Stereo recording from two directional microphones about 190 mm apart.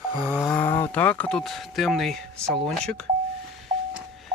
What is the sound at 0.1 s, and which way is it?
Snoring, 15° right (ahead or behind).